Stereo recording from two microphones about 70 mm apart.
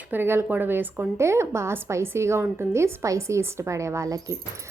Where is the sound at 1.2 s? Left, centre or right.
Right.